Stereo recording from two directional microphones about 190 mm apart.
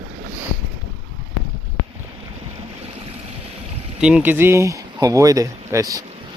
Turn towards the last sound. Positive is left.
turn(degrees=-20)  # may be behind; listen again after turning